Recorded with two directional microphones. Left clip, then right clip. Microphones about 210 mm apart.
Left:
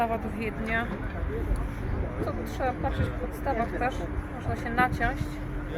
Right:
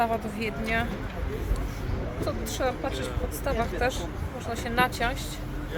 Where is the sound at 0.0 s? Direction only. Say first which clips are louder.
Right 2 dB; 25° right (ahead or behind).